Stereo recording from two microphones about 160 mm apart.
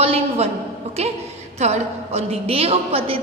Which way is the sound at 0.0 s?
40° right (ahead or behind).